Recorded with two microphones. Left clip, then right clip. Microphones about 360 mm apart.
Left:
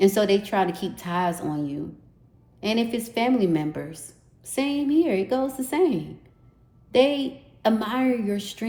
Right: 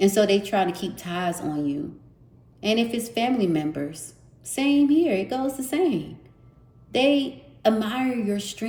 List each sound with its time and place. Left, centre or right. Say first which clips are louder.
0.0 s a woman's voice: even; centre